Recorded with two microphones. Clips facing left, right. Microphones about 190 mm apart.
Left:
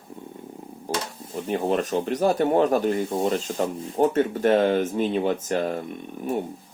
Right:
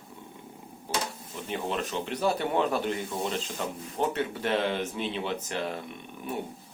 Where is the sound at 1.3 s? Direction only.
45° left (ahead or behind).